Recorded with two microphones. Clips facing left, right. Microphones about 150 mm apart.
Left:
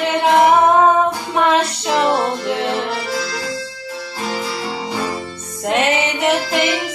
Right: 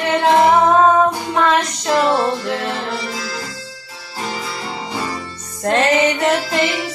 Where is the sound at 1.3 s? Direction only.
20° left (ahead or behind).